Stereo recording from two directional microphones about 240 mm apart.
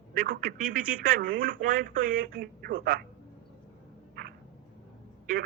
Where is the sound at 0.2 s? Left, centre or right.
Right.